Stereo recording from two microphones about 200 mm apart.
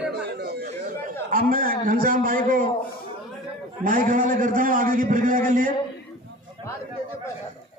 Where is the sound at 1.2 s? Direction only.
45° right (ahead or behind).